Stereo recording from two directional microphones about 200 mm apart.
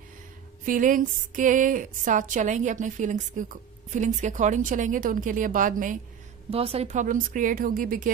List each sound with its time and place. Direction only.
0.7 s a woman's voice: 40° right (ahead or behind)
6.5 s a woman's voice: 30° right (ahead or behind)